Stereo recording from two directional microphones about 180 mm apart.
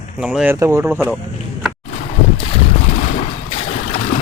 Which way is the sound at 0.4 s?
15° right (ahead or behind).